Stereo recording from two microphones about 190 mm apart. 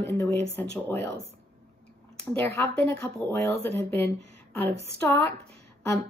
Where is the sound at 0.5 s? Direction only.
10° left (ahead or behind).